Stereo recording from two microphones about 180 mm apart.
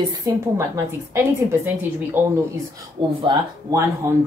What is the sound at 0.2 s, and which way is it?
A woman's voice, 15° right (ahead or behind).